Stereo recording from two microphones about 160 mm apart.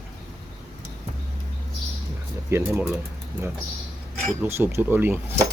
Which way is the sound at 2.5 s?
15° right (ahead or behind).